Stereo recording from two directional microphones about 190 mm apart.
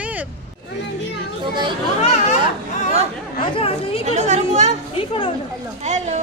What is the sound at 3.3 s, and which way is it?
Speech, 30° left (ahead or behind).